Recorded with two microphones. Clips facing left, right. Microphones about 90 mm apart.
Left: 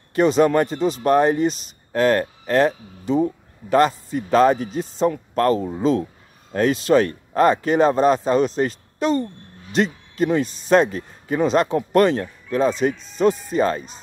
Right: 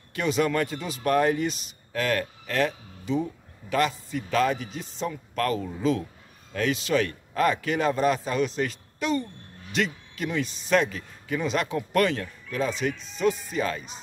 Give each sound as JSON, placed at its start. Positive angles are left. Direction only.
{"t": 0.1, "sound": "speech", "side_deg": 35}